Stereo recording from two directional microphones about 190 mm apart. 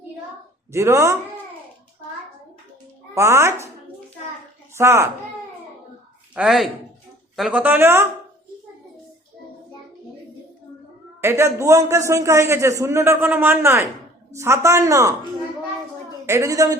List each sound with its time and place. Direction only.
0.7 s a man's voice: 15° right (ahead or behind)
3.2 s a man's voice: 15° right (ahead or behind)
4.7 s speech: 15° right (ahead or behind)
6.3 s a man's voice: 5° right (ahead or behind)
11.2 s a man's voice: 15° right (ahead or behind)
16.2 s a man's voice: 15° right (ahead or behind)